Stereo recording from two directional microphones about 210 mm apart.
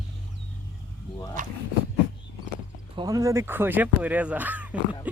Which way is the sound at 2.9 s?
15° right (ahead or behind).